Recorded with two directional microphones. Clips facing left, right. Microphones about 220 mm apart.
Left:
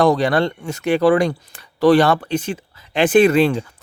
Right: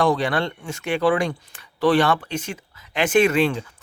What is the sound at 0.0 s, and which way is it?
Speech, 40° left (ahead or behind).